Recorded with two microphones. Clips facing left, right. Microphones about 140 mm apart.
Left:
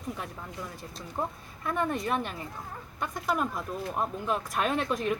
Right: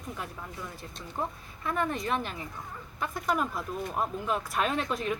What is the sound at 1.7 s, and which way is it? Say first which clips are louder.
Speech: left 1 dB; centre (ahead or behind).